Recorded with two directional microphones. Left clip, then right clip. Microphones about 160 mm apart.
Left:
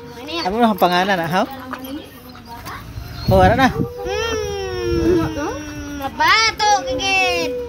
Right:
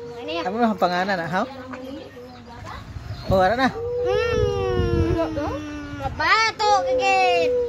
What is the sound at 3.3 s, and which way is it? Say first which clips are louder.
Speech: left 5 dB; 10° left (ahead or behind).